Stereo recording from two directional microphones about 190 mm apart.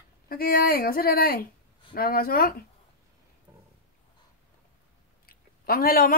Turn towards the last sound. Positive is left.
turn(degrees=50)  # may be behind; listen again after turning